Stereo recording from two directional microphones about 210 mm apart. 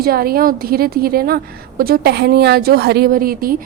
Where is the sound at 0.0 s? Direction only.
45° right (ahead or behind).